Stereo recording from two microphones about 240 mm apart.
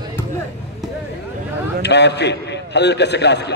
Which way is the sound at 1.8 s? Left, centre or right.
Left.